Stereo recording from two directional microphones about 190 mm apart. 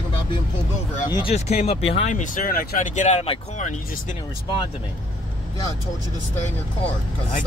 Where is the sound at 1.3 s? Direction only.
35° left (ahead or behind).